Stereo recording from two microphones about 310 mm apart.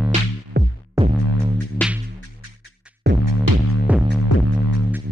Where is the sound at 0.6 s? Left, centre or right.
Right.